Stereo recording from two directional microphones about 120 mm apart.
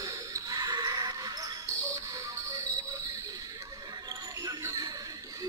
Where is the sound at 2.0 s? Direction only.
30° right (ahead or behind).